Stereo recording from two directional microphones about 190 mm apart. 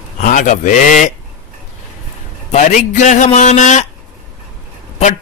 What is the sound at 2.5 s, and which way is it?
A man's voice, 40° left (ahead or behind).